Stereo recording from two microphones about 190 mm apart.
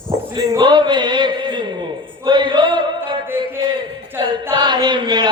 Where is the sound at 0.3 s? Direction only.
20° right (ahead or behind).